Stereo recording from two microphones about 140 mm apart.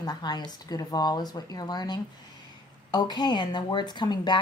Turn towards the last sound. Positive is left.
turn(degrees=30)  # may be behind; listen again after turning